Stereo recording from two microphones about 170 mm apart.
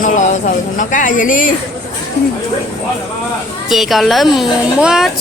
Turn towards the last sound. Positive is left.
turn(degrees=-5)  # may be behind; listen again after turning